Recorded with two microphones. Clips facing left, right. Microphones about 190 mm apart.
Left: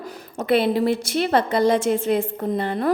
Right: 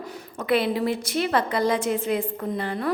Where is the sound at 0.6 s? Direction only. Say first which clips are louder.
Left 5 dB; 30° left (ahead or behind).